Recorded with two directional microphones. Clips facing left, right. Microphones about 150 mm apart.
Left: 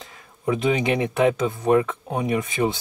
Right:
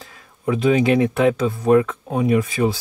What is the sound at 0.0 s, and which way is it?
Speech, 20° left (ahead or behind).